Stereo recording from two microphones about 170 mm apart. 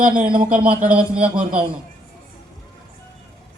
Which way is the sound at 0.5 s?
10° right (ahead or behind).